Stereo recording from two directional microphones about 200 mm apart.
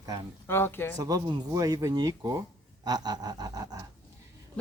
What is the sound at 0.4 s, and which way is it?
Speech, 10° left (ahead or behind).